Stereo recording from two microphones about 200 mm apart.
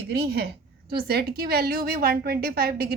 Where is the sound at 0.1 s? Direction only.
55° right (ahead or behind).